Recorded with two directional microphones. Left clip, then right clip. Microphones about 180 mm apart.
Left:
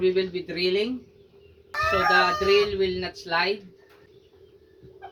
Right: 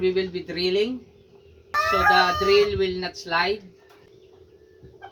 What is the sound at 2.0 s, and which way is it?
Speech, 5° left (ahead or behind).